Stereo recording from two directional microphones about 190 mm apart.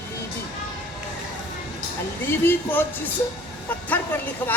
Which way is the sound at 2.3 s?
10° left (ahead or behind).